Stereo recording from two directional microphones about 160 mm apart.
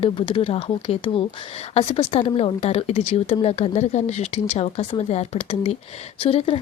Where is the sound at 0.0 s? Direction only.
35° left (ahead or behind).